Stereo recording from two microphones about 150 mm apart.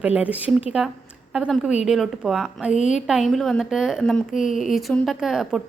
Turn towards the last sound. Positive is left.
turn(degrees=0)  # may be behind; listen again after turning